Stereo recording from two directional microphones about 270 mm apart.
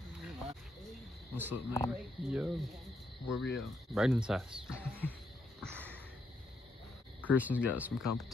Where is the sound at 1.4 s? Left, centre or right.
Centre.